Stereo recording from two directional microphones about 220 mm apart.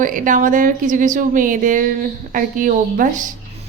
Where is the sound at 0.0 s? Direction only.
35° right (ahead or behind).